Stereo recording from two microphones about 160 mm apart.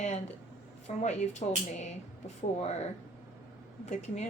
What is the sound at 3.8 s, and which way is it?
Speech, 45° left (ahead or behind).